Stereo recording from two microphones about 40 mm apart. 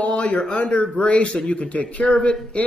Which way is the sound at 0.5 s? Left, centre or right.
Left.